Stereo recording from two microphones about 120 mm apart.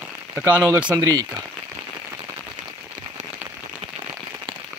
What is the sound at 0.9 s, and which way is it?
Speech, 30° right (ahead or behind).